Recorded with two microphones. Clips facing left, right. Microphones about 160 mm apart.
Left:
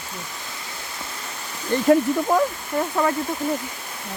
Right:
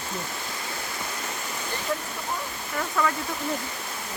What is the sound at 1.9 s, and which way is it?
Speech, 90° left.